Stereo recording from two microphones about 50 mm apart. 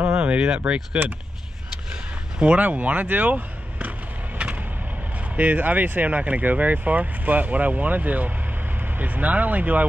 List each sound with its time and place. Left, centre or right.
0.1 s speech: right
2.3 s speech: right
5.3 s speech: right